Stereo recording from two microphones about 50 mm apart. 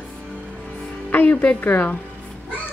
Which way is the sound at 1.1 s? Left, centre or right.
Left.